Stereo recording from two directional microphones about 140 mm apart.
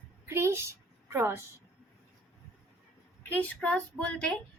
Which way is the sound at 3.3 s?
10° left (ahead or behind).